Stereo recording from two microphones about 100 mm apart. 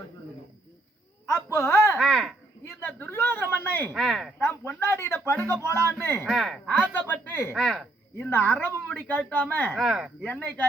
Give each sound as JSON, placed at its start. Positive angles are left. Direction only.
{"t": 1.5, "sound": "speech", "side_deg": 30}
{"t": 2.0, "sound": "speech", "side_deg": 0}
{"t": 2.8, "sound": "speech", "side_deg": 20}
{"t": 3.9, "sound": "speech", "side_deg": 0}
{"t": 4.4, "sound": "speech", "side_deg": 20}
{"t": 6.2, "sound": "speech", "side_deg": 5}
{"t": 6.7, "sound": "speech", "side_deg": 15}
{"t": 7.5, "sound": "speech", "side_deg": 0}
{"t": 8.3, "sound": "speech", "side_deg": 20}
{"t": 9.7, "sound": "speech", "side_deg": -5}